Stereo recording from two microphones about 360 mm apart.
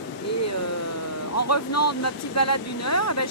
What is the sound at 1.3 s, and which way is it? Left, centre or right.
Speech, left.